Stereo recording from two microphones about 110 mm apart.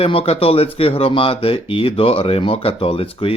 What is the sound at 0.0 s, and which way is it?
Speech, 60° left (ahead or behind).